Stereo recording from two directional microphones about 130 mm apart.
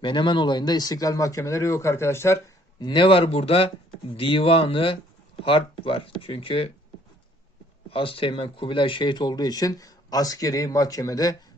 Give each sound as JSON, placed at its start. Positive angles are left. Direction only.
{"t": 0.0, "sound": "speech", "side_deg": 40}
{"t": 2.8, "sound": "speech", "side_deg": 40}
{"t": 7.9, "sound": "speech", "side_deg": 45}